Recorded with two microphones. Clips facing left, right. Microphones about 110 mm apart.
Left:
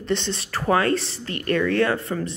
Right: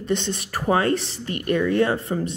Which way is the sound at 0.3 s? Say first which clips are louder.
Left 1 dB; 15° right (ahead or behind).